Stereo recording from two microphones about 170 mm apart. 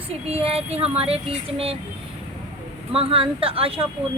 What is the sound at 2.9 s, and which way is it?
Speech, 35° right (ahead or behind).